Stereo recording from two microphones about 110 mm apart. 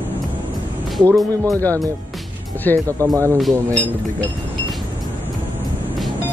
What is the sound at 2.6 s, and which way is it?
Speech, 15° left (ahead or behind).